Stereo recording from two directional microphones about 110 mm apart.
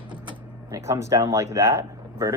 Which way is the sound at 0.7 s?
25° right (ahead or behind).